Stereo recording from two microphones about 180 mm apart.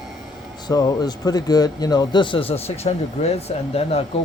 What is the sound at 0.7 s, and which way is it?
Speech, 20° left (ahead or behind).